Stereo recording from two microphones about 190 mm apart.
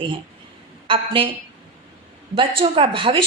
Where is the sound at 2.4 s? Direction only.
30° right (ahead or behind).